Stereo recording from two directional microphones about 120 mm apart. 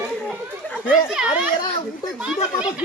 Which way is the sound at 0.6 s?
15° left (ahead or behind).